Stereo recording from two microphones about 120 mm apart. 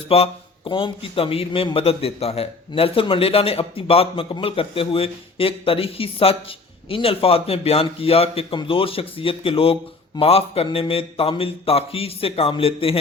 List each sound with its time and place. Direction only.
0.1 s speech: 50° left (ahead or behind)